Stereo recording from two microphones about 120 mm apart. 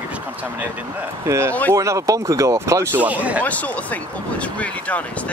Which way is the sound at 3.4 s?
10° left (ahead or behind).